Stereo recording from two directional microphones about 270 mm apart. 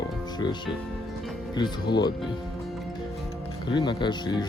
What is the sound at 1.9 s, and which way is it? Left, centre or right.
Speech, centre.